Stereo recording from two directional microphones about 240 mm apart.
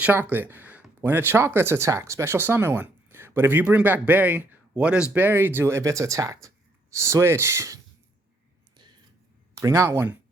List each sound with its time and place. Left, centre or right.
0.0 s speech: centre
8.7 s a sound: centre
9.6 s speech: centre